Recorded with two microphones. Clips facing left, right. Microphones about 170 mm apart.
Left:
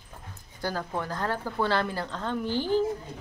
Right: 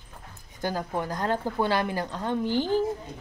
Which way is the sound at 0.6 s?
20° right (ahead or behind).